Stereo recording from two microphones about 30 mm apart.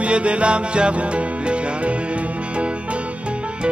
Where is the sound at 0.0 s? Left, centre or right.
Right.